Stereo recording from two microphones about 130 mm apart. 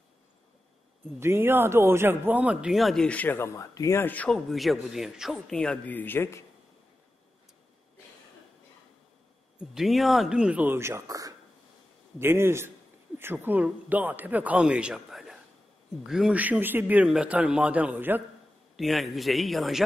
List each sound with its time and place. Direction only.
1.2 s speech: 20° right (ahead or behind); by 4.4 s 10° left (ahead or behind)
4.5 s speech: centre (ahead or behind); by 6.4 s 20° left (ahead or behind)
9.6 s a man's voice: centre (ahead or behind)
18.8 s speech: centre (ahead or behind)